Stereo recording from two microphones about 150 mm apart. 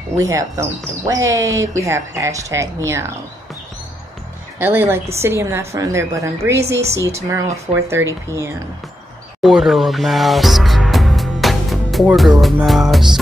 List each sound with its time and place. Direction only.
0.2 s speech: 20° right (ahead or behind)
4.6 s a woman's voice: 15° right (ahead or behind)
9.4 s music: centre (ahead or behind)